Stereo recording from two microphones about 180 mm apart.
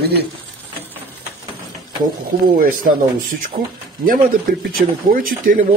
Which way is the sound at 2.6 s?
50° right (ahead or behind).